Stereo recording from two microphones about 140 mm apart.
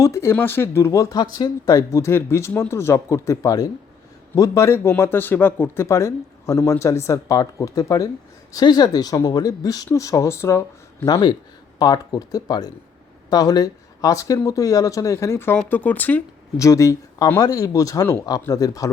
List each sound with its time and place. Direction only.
0.0 s speech: 20° left (ahead or behind)
16.6 s speech: 20° left (ahead or behind)